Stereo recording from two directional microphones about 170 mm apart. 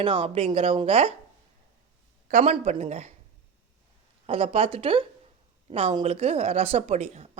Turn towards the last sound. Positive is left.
turn(degrees=-40)  # may be behind; listen again after turning